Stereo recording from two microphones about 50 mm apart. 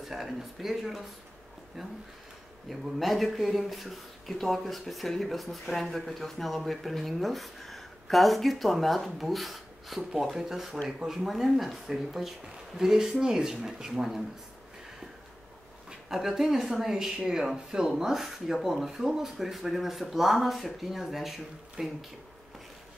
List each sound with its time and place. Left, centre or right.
0.0 s speech: centre
16.1 s speech: centre